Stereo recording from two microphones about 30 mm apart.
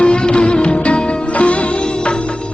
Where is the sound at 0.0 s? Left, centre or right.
Left.